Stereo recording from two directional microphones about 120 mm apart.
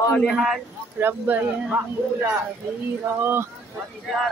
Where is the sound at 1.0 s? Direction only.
15° right (ahead or behind).